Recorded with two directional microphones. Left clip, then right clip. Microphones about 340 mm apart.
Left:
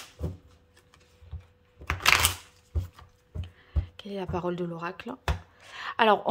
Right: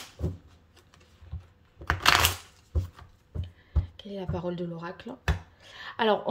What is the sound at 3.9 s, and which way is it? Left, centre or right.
Speech, centre.